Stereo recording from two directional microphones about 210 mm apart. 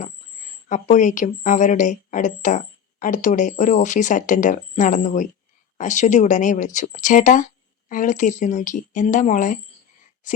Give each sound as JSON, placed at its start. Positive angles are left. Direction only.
{"t": 0.7, "sound": "a woman's voice", "side_deg": 35}